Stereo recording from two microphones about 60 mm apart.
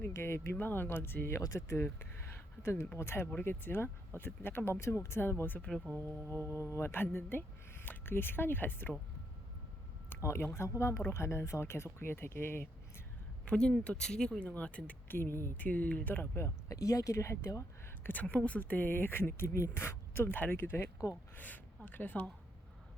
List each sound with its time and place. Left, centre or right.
0.1 s speech: left
0.5 s speech: left
1.4 s speech: left
10.2 s speech: left
13.4 s speech: centre
15.0 s speech: left
15.6 s speech: left
16.6 s speech: left
18.0 s speech: left
18.6 s speech: left
20.1 s speech: left
21.0 s speech: left
21.3 s speech: left